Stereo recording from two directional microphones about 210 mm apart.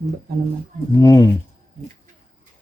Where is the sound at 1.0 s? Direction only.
15° left (ahead or behind).